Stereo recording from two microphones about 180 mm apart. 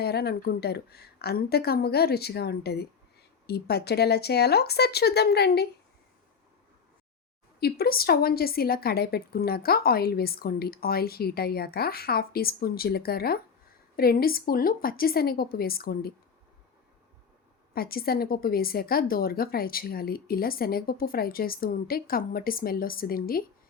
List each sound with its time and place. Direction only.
0.0 s a woman's voice: 60° left (ahead or behind)
7.6 s a woman's voice: 60° left (ahead or behind)
17.7 s a woman's voice: 55° left (ahead or behind)